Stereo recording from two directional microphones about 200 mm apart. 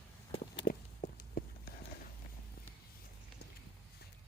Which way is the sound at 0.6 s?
45° left (ahead or behind).